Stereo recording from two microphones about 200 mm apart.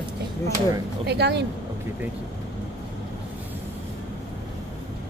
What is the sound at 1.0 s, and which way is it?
Speech, 55° right (ahead or behind).